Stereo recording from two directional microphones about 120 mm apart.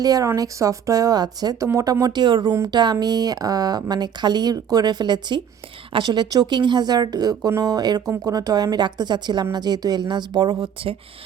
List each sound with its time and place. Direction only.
0.0 s speech: 30° right (ahead or behind); by 10.9 s 45° right (ahead or behind)